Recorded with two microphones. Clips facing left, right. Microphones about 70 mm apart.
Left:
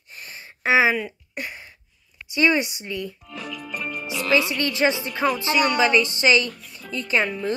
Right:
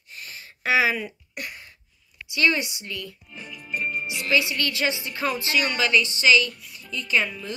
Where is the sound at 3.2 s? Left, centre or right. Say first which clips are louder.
Left 7 dB; left.